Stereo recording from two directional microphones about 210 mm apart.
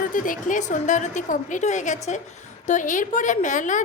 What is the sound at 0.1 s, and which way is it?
A woman's voice, 40° left (ahead or behind).